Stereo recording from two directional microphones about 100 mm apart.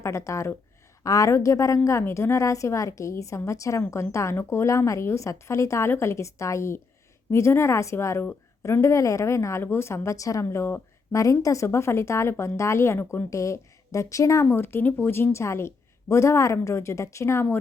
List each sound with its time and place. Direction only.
0.0 s a woman's voice: 30° left (ahead or behind)